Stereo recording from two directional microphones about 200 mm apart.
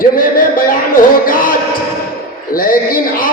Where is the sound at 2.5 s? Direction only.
45° left (ahead or behind).